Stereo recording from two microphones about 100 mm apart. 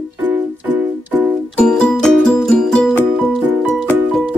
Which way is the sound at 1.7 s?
5° left (ahead or behind).